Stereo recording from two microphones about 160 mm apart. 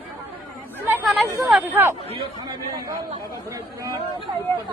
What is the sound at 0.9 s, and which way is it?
Chatter, 15° right (ahead or behind).